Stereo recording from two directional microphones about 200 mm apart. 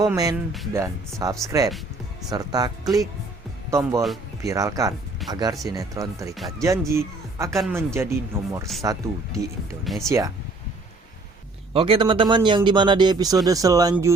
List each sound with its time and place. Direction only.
0.0 s a man's voice: 20° right (ahead or behind)
9.8 s speech: centre (ahead or behind)
10.1 s speech: 15° right (ahead or behind)
11.7 s a man's voice: 25° right (ahead or behind)